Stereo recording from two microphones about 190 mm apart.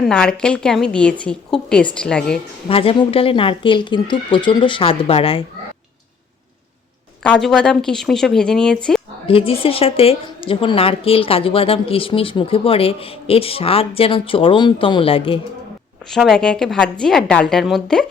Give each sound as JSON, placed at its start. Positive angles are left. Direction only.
{"t": 0.0, "sound": "a woman's voice", "side_deg": 5}
{"t": 2.6, "sound": "speech", "side_deg": 30}
{"t": 7.2, "sound": "a woman's voice", "side_deg": 5}
{"t": 9.2, "sound": "speech", "side_deg": 30}
{"t": 16.0, "sound": "a woman's voice", "side_deg": 0}